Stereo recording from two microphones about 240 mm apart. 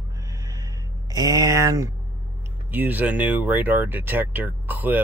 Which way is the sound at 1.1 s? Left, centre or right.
Centre.